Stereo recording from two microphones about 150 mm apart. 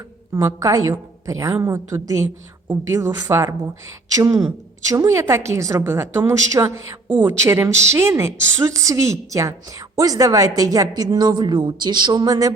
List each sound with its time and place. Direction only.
0.3 s a woman's voice: 20° right (ahead or behind)